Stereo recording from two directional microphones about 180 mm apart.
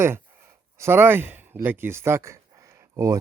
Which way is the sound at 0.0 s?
15° right (ahead or behind).